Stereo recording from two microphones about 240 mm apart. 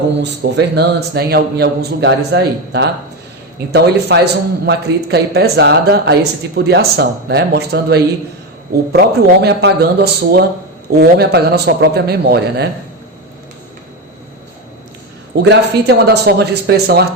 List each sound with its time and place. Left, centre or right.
0.2 s a man's voice: right
15.4 s a man's voice: right